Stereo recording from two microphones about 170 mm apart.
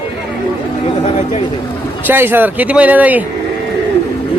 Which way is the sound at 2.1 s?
10° right (ahead or behind).